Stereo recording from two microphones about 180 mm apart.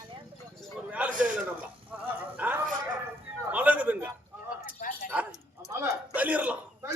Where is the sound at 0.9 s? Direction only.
10° right (ahead or behind).